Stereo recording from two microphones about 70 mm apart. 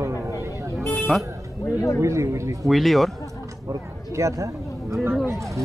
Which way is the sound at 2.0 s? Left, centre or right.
Right.